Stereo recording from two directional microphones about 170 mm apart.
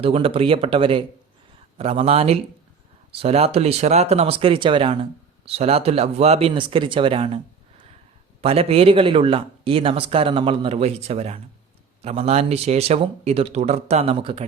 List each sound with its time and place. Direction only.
0.0 s speech: 35° right (ahead or behind)